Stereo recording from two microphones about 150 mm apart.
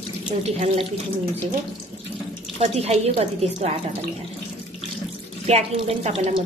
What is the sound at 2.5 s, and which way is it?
Speech, 45° right (ahead or behind).